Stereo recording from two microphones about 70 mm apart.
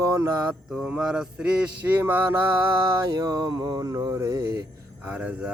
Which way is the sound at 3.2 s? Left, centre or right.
Right.